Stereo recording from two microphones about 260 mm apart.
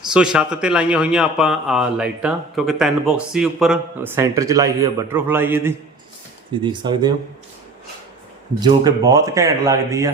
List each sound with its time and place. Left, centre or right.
0.1 s speech: centre
8.6 s speech: centre